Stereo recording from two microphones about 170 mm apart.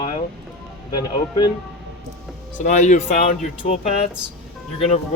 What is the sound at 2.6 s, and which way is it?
Speech, 45° left (ahead or behind).